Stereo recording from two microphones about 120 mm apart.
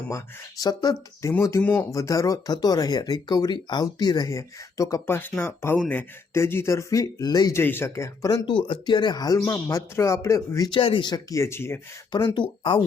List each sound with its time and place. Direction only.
0.6 s speech: 35° left (ahead or behind)
7.5 s speech: 20° left (ahead or behind)
10.8 s speech: 45° left (ahead or behind); by 11.8 s 20° left (ahead or behind)
12.1 s speech: 40° left (ahead or behind)